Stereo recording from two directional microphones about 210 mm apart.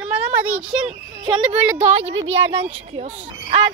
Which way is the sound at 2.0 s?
65° right (ahead or behind).